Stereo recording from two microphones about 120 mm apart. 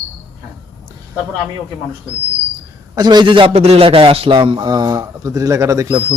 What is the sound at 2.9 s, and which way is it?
A man's voice, 35° right (ahead or behind).